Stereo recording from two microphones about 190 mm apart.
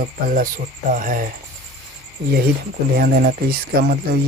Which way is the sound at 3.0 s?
50° right (ahead or behind).